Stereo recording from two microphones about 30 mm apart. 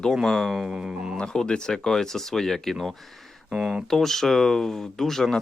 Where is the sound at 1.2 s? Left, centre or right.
Left; by 2.7 s centre.